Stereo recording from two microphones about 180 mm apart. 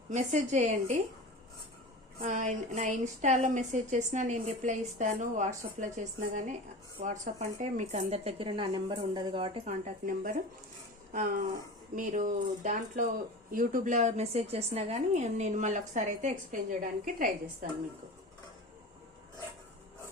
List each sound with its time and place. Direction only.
0.1 s speech: 40° right (ahead or behind)
2.2 s a woman's voice: 45° right (ahead or behind)